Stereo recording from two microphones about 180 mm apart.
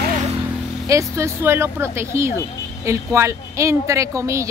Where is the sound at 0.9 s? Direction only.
15° right (ahead or behind).